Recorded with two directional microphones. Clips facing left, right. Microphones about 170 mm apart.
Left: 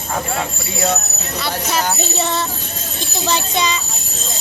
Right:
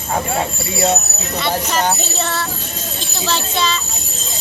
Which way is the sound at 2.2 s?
15° left (ahead or behind).